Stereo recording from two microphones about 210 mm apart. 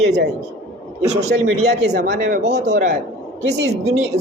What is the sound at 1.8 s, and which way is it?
Speech, 55° right (ahead or behind).